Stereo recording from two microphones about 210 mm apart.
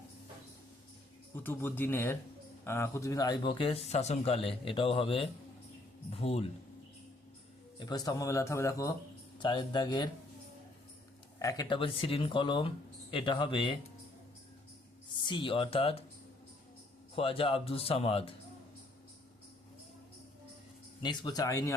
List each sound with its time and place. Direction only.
1.5 s speech: 10° left (ahead or behind); by 6.5 s 30° left (ahead or behind)
7.8 s speech: 20° left (ahead or behind)
11.3 s speech: 15° left (ahead or behind)
15.2 s speech: 20° left (ahead or behind)
17.2 s speech: 25° left (ahead or behind)
21.0 s speech: 20° left (ahead or behind)